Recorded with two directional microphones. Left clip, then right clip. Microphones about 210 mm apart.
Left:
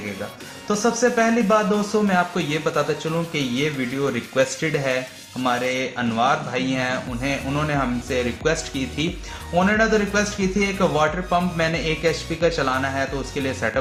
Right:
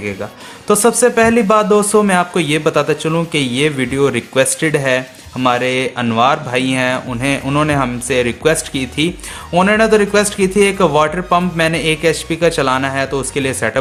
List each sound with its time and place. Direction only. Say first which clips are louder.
0.7 s speech: right 8 dB; 50° right (ahead or behind)
9.6 s speech: right 8 dB; 50° right (ahead or behind)